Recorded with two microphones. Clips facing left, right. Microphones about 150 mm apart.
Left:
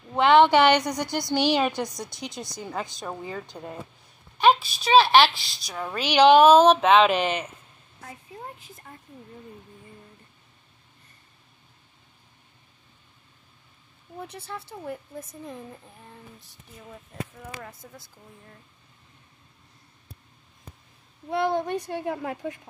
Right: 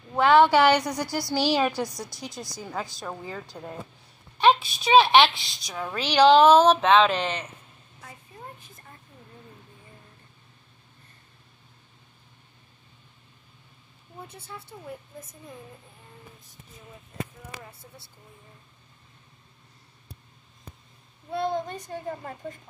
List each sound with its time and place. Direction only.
0.2 s a woman's voice: 20° left (ahead or behind)
0.5 s a woman's voice: 5° right (ahead or behind); by 7.4 s 10° left (ahead or behind)
14.2 s a woman's voice: 80° left
17.6 s speech: 90° left
21.3 s a child's voice: 70° left (ahead or behind)